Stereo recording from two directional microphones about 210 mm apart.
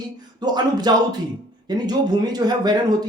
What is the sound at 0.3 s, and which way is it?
Speech, 20° right (ahead or behind).